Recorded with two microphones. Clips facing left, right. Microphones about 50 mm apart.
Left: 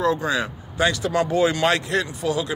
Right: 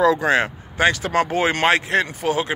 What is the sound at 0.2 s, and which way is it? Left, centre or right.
Speech, right.